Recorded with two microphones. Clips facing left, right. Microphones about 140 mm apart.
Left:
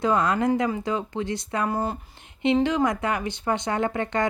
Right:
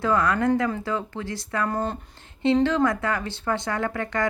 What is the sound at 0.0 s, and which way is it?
Speech, 20° left (ahead or behind).